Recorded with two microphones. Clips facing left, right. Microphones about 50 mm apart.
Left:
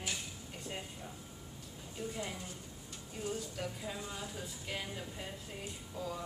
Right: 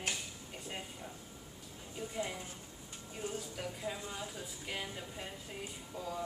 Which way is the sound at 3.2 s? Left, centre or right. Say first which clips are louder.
Left 2 dB; right.